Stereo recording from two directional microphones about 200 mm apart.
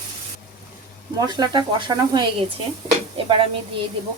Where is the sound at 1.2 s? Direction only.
20° right (ahead or behind).